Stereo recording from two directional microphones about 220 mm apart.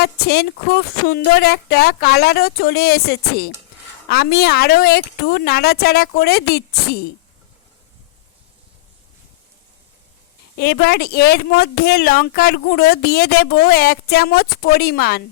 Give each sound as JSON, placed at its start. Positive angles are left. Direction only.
{"t": 0.0, "sound": "a woman's voice", "side_deg": 45}
{"t": 10.6, "sound": "a woman's voice", "side_deg": 45}